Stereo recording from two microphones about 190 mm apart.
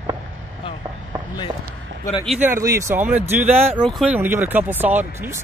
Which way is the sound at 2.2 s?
10° right (ahead or behind).